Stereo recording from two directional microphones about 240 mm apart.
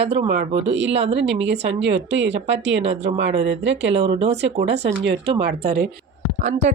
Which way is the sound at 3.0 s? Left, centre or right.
Right.